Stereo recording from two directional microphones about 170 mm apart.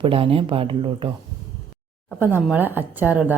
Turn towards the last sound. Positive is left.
turn(degrees=-10)  # may be behind; listen again after turning